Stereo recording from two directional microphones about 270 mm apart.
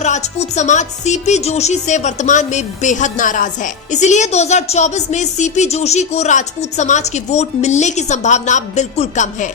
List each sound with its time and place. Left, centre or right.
0.0 s speech: left